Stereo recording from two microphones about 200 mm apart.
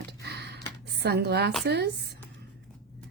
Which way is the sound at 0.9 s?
55° right (ahead or behind).